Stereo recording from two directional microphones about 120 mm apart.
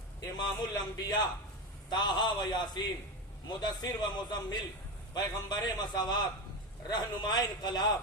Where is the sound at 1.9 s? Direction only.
35° left (ahead or behind).